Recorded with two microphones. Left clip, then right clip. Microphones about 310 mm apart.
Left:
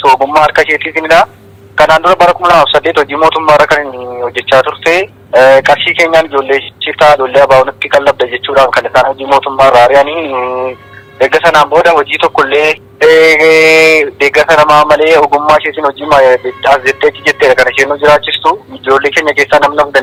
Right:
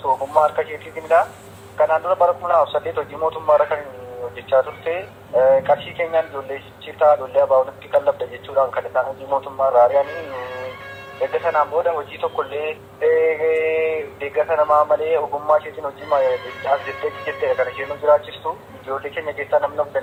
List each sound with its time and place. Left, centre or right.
0.0 s speech: left
11.2 s speech: left
17.0 s speech: left
17.8 s speech: left